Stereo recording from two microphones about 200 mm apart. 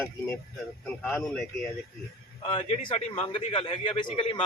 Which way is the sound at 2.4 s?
30° left (ahead or behind).